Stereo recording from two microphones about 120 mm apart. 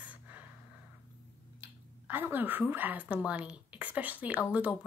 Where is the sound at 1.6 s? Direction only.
15° right (ahead or behind).